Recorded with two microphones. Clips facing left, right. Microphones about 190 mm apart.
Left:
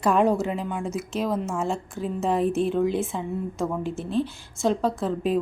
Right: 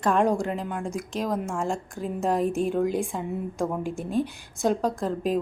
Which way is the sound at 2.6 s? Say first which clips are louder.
Left 2 dB; 40° right (ahead or behind).